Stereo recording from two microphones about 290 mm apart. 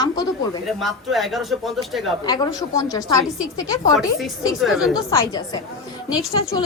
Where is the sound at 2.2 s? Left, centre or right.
Centre.